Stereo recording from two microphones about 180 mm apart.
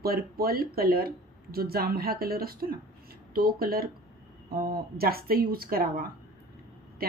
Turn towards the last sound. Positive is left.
turn(degrees=-55)  # may be behind; listen again after turning